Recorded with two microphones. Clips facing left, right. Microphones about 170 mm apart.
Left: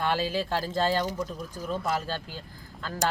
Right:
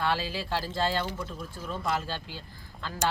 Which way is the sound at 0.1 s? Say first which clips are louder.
Left 3 dB; 45° left (ahead or behind).